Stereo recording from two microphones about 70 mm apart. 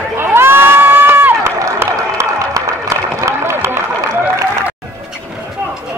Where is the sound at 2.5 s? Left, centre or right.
Right.